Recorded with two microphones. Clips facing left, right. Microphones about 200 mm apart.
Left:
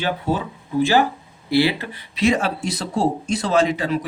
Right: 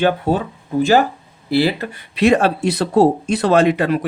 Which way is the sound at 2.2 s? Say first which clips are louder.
Right 5 dB; 65° right (ahead or behind).